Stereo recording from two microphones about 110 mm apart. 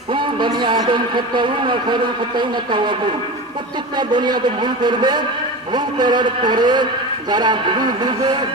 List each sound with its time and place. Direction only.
0.1 s a man's voice: 45° right (ahead or behind)